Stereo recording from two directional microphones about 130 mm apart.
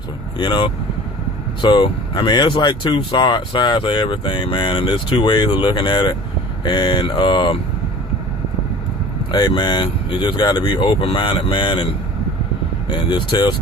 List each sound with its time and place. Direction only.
0.3 s speech: 40° left (ahead or behind)
9.3 s speech: 35° left (ahead or behind)
12.9 s speech: 35° left (ahead or behind)